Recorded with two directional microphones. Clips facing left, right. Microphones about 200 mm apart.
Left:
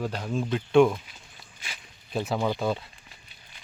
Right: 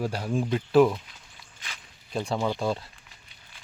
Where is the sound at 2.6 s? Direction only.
Centre (ahead or behind).